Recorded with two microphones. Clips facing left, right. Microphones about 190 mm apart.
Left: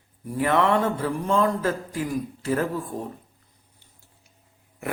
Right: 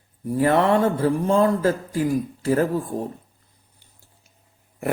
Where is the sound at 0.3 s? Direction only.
35° right (ahead or behind).